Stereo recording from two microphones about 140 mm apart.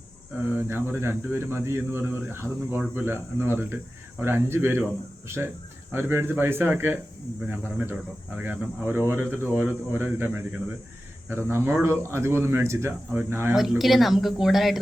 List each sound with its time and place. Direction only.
0.5 s speech: 15° right (ahead or behind)
5.9 s speech: 15° right (ahead or behind)
13.5 s speech: centre (ahead or behind)